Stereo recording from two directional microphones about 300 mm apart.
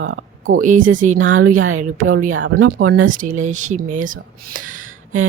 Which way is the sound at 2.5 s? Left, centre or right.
Right.